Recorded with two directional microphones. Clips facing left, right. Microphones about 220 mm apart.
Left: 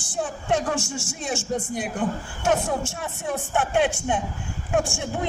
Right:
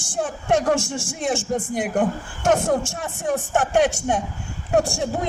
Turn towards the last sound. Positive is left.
turn(degrees=-40)  # may be behind; listen again after turning